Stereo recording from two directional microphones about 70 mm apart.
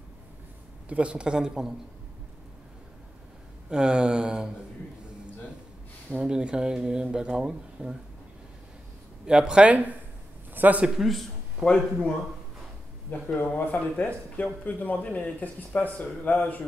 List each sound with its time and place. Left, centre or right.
0.8 s speech: centre
3.7 s speech: centre
6.0 s speech: centre
9.2 s speech: centre
10.5 s a man's voice: right
11.0 s a man's voice: centre
11.6 s a man's voice: centre
13.1 s speech: centre